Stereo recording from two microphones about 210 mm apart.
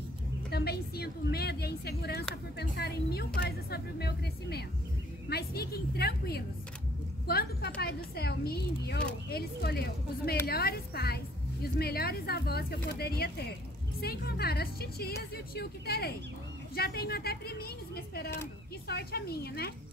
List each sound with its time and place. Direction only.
0.5 s speech: 50° left (ahead or behind)